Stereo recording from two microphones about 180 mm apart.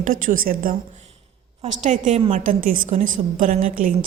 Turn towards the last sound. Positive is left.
turn(degrees=-45)  # may be behind; listen again after turning